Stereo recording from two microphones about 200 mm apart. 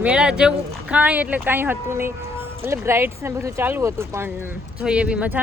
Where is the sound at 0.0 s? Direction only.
5° right (ahead or behind).